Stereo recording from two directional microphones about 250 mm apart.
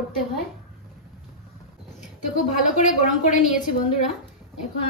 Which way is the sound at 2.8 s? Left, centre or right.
Left.